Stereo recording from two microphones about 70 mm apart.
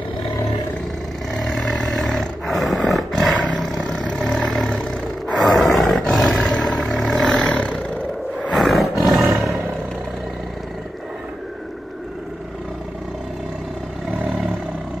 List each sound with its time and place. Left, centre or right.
1.4 s roar: centre
4.2 s vehicle: centre
5.4 s roar: centre
7.4 s roar: centre
8.4 s roar: centre
14.2 s vehicle: centre